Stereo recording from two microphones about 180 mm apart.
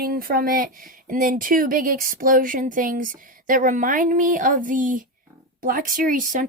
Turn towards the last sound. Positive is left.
turn(degrees=-45)  # may be behind; listen again after turning